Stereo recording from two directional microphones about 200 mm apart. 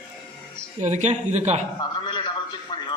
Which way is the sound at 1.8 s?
25° left (ahead or behind).